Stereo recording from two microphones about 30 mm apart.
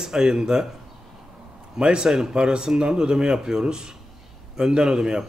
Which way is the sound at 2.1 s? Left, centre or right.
Centre.